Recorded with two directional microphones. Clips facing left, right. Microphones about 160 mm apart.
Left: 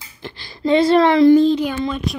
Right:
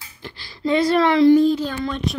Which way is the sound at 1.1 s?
45° left (ahead or behind).